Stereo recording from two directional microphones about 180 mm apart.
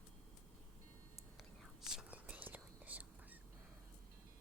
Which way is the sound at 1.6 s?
Centre (ahead or behind).